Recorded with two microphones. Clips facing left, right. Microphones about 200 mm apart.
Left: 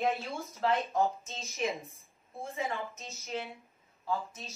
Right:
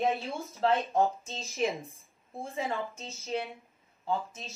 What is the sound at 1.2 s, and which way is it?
A woman's voice, 30° right (ahead or behind).